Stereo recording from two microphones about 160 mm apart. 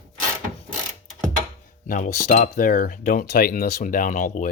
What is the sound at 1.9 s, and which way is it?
Speech, 55° left (ahead or behind).